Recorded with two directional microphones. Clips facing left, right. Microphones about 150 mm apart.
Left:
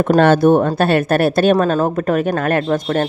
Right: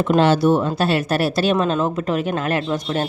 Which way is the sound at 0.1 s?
55° left (ahead or behind).